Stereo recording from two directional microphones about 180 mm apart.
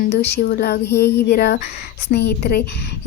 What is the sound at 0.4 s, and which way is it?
A woman's voice, 60° left (ahead or behind).